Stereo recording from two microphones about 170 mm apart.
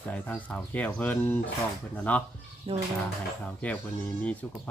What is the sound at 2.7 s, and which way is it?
Speech, 35° right (ahead or behind).